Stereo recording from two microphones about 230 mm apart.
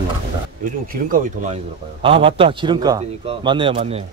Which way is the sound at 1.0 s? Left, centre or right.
Right.